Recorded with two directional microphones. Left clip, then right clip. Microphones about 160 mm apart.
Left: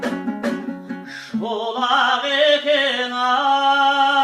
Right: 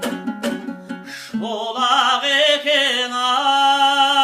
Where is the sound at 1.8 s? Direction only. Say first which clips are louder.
Right 2 dB; 15° right (ahead or behind).